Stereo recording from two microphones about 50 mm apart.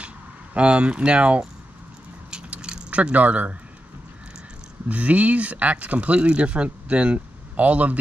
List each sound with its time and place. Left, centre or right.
0.6 s speech: right
2.3 s keys jangling: centre
4.8 s speech: right